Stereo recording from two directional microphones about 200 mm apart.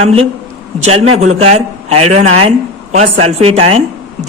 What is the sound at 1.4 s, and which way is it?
A man's voice, 30° right (ahead or behind).